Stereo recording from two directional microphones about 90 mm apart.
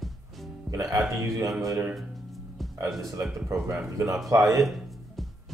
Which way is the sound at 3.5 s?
30° right (ahead or behind).